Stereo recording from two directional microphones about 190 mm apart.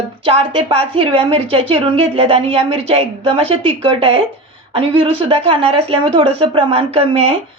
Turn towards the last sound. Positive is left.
turn(degrees=-30)  # may be behind; listen again after turning